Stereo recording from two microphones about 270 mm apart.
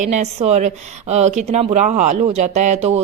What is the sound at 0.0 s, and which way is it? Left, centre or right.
A woman's voice, right.